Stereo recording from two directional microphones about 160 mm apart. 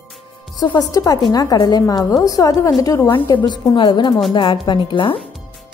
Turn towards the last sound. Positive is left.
turn(degrees=30)  # may be behind; listen again after turning